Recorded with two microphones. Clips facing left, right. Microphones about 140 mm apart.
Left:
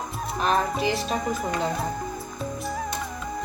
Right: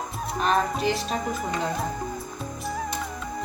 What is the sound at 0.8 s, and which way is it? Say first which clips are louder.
Music: left 1 dB; centre (ahead or behind).